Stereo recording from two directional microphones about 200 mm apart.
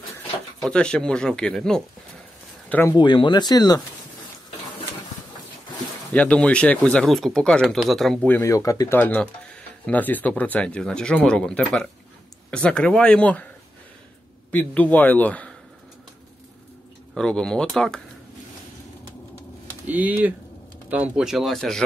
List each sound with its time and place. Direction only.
0.6 s speech: 5° left (ahead or behind)
3.0 s speech: 25° left (ahead or behind)
6.1 s speech: 5° left (ahead or behind)
8.4 s speech: 15° left (ahead or behind)
14.5 s speech: 5° left (ahead or behind)
17.1 s speech: 5° left (ahead or behind)
19.9 s speech: 10° right (ahead or behind)